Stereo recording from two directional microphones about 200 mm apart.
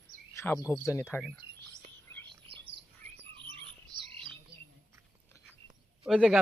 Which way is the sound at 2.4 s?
25° right (ahead or behind).